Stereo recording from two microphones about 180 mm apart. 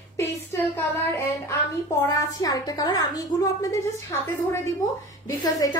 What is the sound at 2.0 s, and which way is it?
A woman's voice, 20° left (ahead or behind).